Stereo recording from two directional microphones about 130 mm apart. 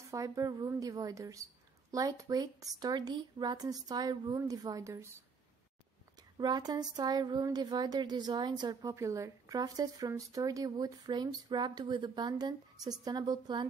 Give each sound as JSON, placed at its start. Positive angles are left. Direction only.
{"t": 0.1, "sound": "a woman's voice", "side_deg": -25}
{"t": 6.3, "sound": "speech", "side_deg": -30}
{"t": 8.9, "sound": "a woman's voice", "side_deg": -20}